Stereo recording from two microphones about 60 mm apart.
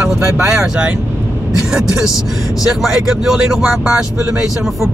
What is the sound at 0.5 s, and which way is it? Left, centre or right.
Speech, centre.